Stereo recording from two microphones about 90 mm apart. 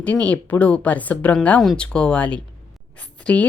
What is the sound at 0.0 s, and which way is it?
Speech, 15° left (ahead or behind).